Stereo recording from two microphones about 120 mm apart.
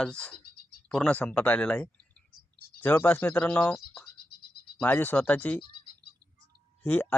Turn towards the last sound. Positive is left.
turn(degrees=15)  # may be behind; listen again after turning